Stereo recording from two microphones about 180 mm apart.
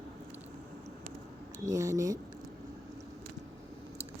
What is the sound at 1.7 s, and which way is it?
Speech, 15° right (ahead or behind).